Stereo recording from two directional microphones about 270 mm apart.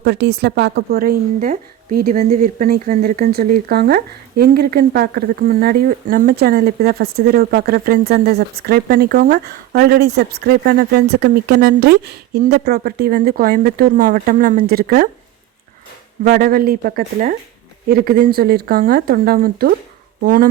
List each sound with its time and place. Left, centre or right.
0.0 s a woman's voice: right
16.2 s a woman's voice: right